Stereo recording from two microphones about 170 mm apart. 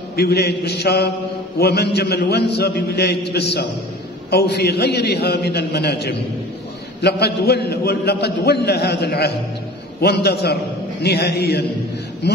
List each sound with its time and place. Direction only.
0.1 s a man's voice: 70° left (ahead or behind)